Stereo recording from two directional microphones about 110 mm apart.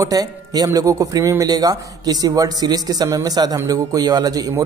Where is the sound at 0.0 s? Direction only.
35° right (ahead or behind).